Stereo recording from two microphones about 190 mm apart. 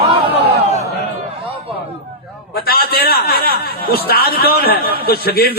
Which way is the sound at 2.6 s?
55° left (ahead or behind).